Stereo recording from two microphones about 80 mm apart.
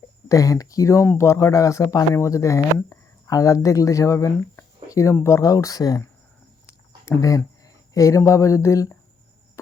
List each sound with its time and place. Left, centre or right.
0.3 s speech: left
6.7 s a sound: left
7.9 s speech: left